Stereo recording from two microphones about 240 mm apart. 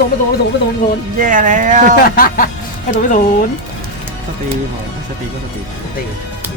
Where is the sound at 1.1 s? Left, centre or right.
Right.